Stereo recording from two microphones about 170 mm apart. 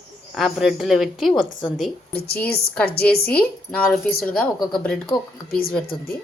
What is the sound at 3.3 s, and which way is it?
Speech, 5° left (ahead or behind).